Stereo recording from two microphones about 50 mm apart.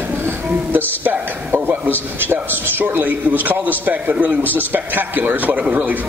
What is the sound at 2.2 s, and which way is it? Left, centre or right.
A man's voice, right.